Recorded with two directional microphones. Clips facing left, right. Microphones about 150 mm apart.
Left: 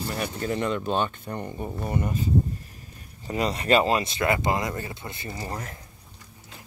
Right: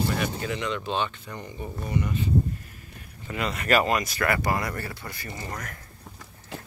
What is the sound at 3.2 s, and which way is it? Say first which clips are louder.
Speech: left 3 dB; 35° left (ahead or behind).